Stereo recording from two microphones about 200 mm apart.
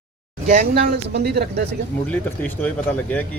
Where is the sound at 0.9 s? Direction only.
55° right (ahead or behind).